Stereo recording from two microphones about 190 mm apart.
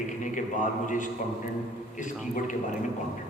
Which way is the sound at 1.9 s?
40° left (ahead or behind).